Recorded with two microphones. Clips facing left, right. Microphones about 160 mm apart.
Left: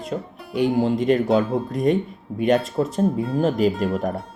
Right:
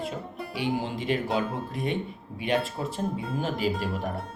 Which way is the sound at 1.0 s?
40° left (ahead or behind).